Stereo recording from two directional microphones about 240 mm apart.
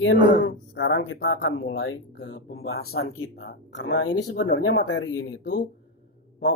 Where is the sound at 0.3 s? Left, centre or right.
Left.